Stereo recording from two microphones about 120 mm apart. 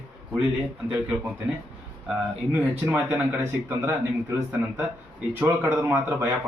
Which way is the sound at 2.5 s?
15° right (ahead or behind).